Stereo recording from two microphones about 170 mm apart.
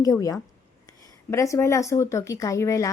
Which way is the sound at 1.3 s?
15° left (ahead or behind).